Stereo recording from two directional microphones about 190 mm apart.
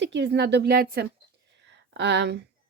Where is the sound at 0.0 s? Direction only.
70° right (ahead or behind).